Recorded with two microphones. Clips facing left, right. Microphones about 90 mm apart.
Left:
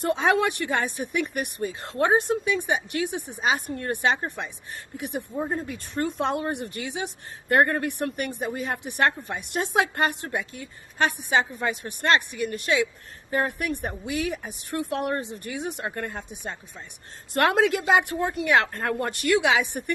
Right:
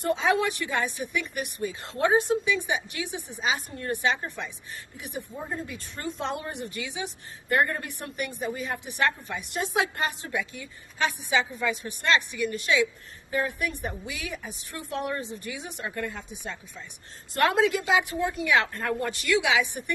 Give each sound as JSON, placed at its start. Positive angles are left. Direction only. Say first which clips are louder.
{"t": 0.0, "sound": "speech", "louder": "left 2 dB", "side_deg": 60}
{"t": 5.5, "sound": "speech", "louder": "left 4 dB", "side_deg": 45}